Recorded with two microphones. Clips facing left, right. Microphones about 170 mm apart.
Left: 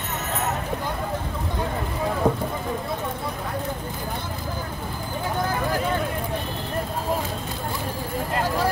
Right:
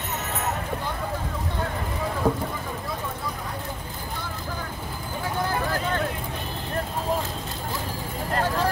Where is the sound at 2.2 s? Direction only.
15° left (ahead or behind).